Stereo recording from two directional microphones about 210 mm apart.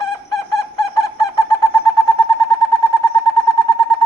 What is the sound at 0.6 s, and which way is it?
Bird, 15° left (ahead or behind).